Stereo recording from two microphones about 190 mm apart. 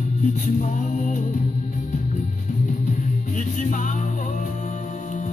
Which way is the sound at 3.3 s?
40° left (ahead or behind).